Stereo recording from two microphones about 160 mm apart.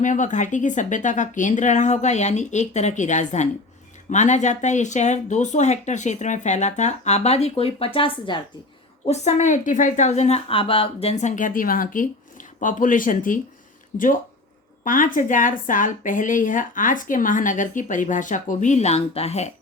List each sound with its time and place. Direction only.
0.0 s a woman's voice: 50° left (ahead or behind); by 8.4 s 30° left (ahead or behind)
9.0 s a woman's voice: 45° left (ahead or behind)
14.8 s a woman's voice: 55° left (ahead or behind); by 19.5 s 40° left (ahead or behind)